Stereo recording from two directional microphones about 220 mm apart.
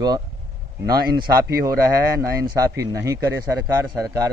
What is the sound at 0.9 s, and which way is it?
Speech, 45° right (ahead or behind).